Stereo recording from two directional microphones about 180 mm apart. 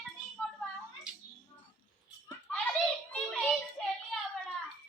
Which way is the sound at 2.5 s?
5° left (ahead or behind).